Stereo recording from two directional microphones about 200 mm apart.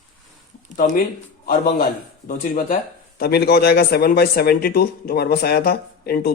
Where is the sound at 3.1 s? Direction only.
55° left (ahead or behind).